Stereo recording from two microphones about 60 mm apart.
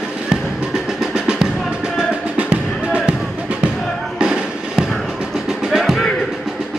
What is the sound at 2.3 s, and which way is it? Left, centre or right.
Music, right.